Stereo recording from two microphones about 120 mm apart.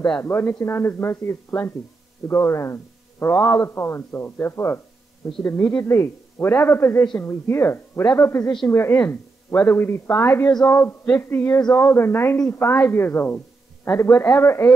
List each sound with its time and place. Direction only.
0.2 s a man's voice: 20° left (ahead or behind)